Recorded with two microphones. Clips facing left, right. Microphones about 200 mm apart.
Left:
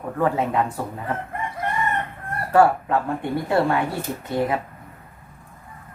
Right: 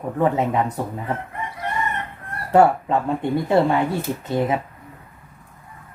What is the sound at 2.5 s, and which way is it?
Speech, 20° right (ahead or behind).